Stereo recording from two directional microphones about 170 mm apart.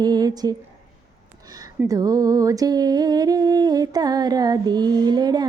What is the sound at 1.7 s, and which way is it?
Speech, 20° right (ahead or behind).